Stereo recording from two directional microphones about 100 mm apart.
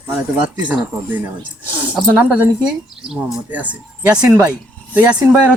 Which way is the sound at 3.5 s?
15° right (ahead or behind).